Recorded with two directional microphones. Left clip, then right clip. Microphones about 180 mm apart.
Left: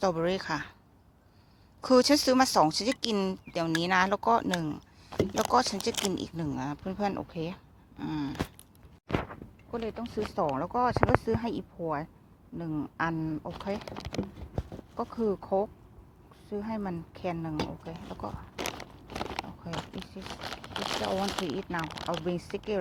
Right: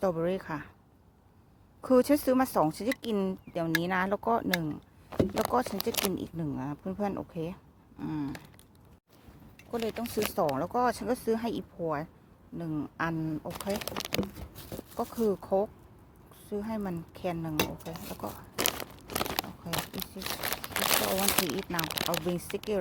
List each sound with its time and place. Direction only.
0.0 s speech: 5° right (ahead or behind)
1.8 s speech: 10° right (ahead or behind)
9.7 s speech: 20° right (ahead or behind); by 18.3 s 5° right (ahead or behind)
18.5 s crunch: 30° right (ahead or behind)
20.0 s speech: 15° right (ahead or behind)
20.3 s crumpling: 30° right (ahead or behind)
21.8 s speech: 50° right (ahead or behind)
22.0 s speech: 15° right (ahead or behind)